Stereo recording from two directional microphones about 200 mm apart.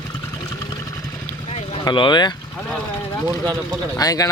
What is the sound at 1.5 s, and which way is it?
Vehicle, 25° left (ahead or behind).